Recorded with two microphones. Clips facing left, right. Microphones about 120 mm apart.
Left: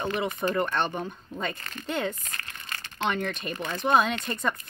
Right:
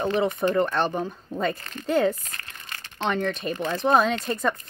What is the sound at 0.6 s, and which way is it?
Speech, centre (ahead or behind).